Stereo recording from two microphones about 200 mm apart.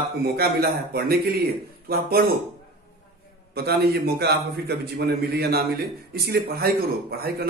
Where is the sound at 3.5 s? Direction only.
50° right (ahead or behind).